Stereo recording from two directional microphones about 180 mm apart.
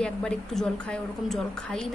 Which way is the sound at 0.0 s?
5° left (ahead or behind).